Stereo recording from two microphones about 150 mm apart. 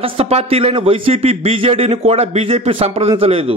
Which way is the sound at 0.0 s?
40° right (ahead or behind).